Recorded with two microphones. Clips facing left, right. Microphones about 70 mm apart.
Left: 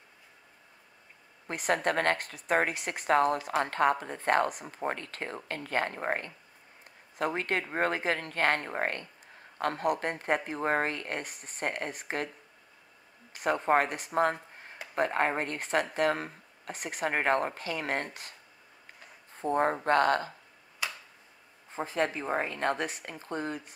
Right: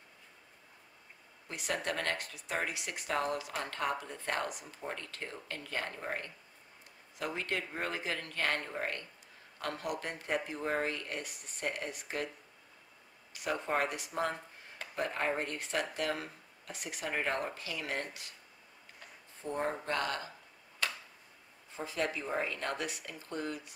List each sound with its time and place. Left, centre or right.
1.5 s speech: left
13.3 s speech: left
19.4 s speech: left
20.8 s tick-tock: centre
21.7 s speech: left